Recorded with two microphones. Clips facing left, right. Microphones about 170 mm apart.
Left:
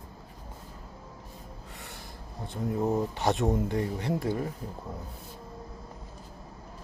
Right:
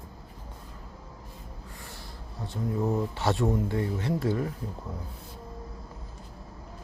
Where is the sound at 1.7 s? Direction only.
65° left (ahead or behind).